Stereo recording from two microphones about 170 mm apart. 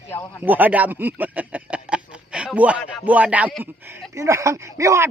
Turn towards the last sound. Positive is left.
turn(degrees=-15)  # may be behind; listen again after turning